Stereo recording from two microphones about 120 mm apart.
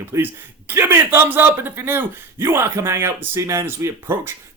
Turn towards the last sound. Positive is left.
turn(degrees=-20)  # may be behind; listen again after turning